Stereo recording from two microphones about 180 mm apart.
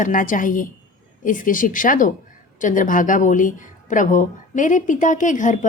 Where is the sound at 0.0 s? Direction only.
45° left (ahead or behind).